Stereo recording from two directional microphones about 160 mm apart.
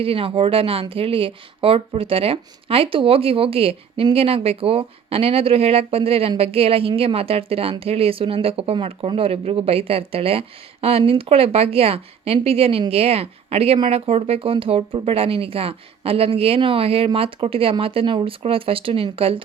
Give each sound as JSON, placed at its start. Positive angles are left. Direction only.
{"t": 0.0, "sound": "speech", "side_deg": -35}